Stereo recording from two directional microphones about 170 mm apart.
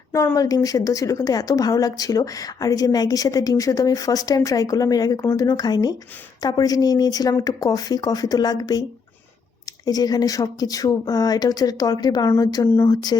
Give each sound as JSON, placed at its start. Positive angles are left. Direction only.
{"t": 0.1, "sound": "a woman's voice", "side_deg": 20}
{"t": 9.8, "sound": "a woman's voice", "side_deg": 20}